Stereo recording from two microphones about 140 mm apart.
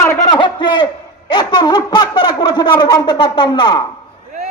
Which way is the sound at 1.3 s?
30° left (ahead or behind).